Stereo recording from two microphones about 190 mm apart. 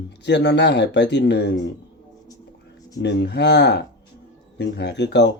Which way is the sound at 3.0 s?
65° left (ahead or behind).